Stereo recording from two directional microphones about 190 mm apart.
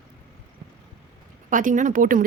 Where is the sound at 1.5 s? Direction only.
45° right (ahead or behind).